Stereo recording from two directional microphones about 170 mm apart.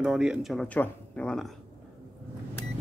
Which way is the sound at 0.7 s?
10° left (ahead or behind).